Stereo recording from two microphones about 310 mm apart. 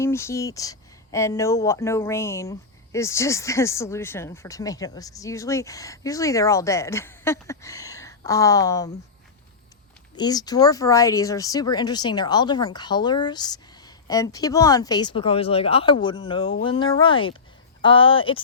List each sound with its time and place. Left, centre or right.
0.0 s speech: centre
10.2 s speech: centre